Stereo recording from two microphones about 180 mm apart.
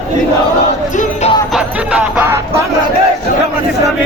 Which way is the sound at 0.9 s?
35° left (ahead or behind).